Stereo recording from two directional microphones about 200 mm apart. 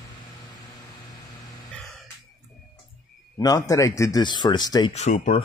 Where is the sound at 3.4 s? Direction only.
20° left (ahead or behind).